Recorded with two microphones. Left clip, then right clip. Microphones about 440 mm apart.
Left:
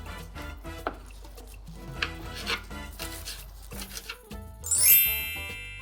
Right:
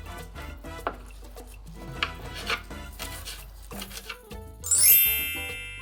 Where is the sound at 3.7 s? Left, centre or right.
Right.